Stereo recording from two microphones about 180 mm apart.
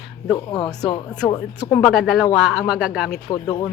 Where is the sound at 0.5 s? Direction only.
20° left (ahead or behind).